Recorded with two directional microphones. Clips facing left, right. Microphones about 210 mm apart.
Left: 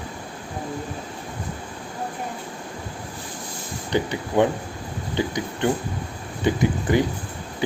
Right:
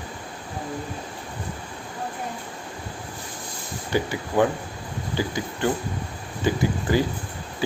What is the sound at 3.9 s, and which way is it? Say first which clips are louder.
Speech: left 2 dB; 20° left (ahead or behind).